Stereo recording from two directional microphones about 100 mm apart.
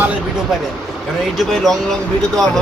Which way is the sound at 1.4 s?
5° left (ahead or behind).